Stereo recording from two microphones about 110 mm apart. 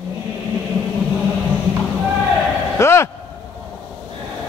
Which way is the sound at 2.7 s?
25° left (ahead or behind).